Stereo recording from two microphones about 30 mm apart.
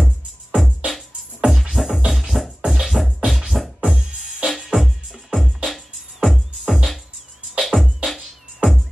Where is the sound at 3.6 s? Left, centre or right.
Centre.